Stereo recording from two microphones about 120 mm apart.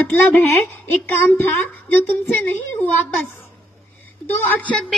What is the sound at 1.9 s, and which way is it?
Speech, 15° left (ahead or behind).